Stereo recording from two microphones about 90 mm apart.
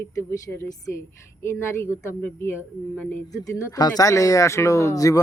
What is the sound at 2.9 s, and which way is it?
Speech, 15° left (ahead or behind).